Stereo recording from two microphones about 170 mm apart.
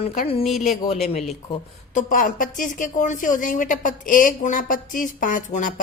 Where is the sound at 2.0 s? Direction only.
50° left (ahead or behind).